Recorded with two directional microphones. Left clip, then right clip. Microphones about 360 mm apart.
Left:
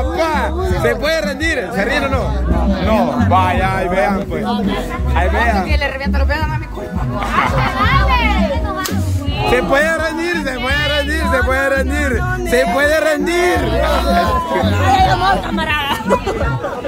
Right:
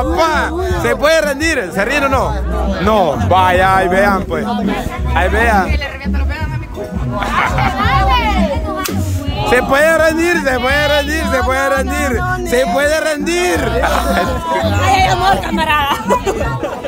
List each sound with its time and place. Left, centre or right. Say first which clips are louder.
0.1 s speech: right 2 dB; centre
7.8 s music: right 1 dB; centre
9.5 s speech: right 3 dB; centre
14.8 s music: even; right
15.7 s chatter: right 4 dB; centre